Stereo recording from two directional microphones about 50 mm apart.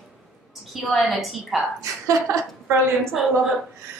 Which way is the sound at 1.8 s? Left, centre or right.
Right.